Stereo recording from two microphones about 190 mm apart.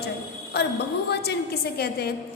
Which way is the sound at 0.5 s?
60° left (ahead or behind).